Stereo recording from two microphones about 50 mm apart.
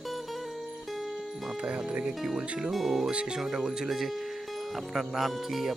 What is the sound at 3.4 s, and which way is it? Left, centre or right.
Speech, centre.